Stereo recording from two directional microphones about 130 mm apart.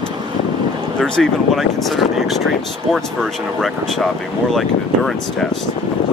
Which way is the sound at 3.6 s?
Centre (ahead or behind).